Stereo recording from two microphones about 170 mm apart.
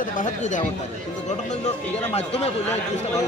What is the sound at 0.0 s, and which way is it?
A man's voice, 50° left (ahead or behind).